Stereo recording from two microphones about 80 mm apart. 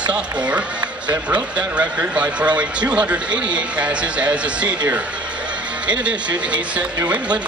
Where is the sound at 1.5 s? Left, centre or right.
Centre.